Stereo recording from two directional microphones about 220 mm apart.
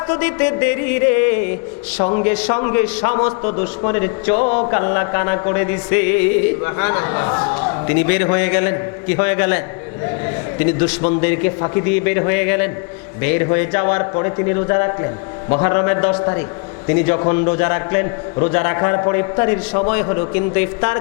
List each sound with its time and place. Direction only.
0.1 s a man's voice: 15° left (ahead or behind)
2.0 s speech: 30° left (ahead or behind)
2.2 s a man's voice: 10° left (ahead or behind)
2.5 s a man's voice: 20° left (ahead or behind)